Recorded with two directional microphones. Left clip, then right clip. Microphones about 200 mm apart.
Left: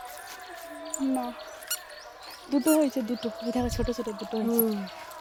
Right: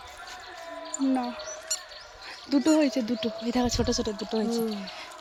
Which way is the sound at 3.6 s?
40° right (ahead or behind).